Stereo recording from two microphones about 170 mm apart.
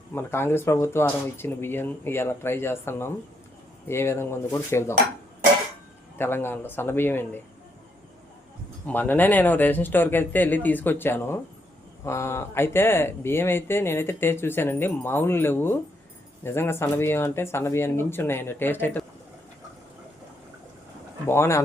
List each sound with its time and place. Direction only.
0.1 s speech: 15° left (ahead or behind)
6.1 s speech: 15° left (ahead or behind)
8.9 s speech: 10° left (ahead or behind)
21.2 s speech: 15° left (ahead or behind)